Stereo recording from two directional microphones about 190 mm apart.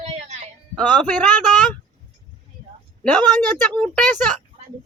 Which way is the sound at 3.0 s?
5° left (ahead or behind).